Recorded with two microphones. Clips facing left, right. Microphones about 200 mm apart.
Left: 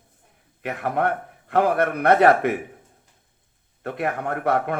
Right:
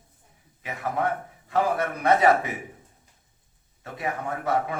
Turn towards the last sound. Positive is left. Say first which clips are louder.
# left 4 dB
turn(degrees=60)  # may be behind; listen again after turning